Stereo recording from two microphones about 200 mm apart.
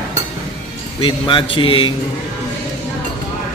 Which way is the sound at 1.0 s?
25° left (ahead or behind).